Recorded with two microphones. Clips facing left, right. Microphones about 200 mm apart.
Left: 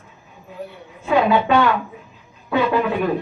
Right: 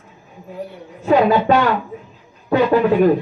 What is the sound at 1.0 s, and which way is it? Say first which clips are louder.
Speech: right 3 dB; 40° right (ahead or behind).